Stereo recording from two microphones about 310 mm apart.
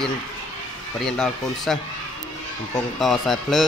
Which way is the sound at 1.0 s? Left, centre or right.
Centre.